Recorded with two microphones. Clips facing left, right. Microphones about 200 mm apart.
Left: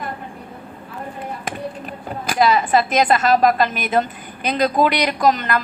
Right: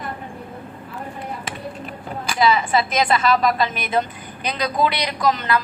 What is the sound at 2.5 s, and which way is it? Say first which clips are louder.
Speech: even; 45° left (ahead or behind).